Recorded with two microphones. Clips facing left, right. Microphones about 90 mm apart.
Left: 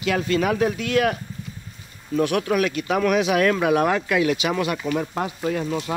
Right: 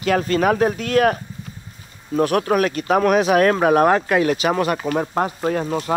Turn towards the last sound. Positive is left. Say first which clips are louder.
# right 3 dB
turn(degrees=-40)  # may be behind; listen again after turning